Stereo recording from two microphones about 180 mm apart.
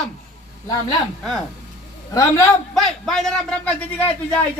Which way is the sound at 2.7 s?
Centre (ahead or behind).